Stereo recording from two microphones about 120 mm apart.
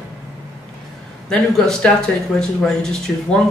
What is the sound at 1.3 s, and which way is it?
A man's voice, 5° left (ahead or behind).